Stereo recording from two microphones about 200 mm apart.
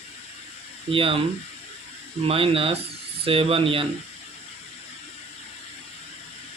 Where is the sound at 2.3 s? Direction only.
25° right (ahead or behind).